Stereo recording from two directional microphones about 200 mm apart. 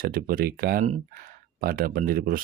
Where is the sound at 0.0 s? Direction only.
45° right (ahead or behind).